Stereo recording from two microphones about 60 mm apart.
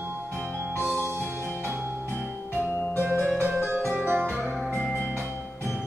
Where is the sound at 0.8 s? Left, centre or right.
Right.